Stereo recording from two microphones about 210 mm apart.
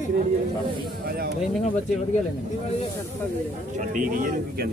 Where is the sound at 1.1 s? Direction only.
50° right (ahead or behind).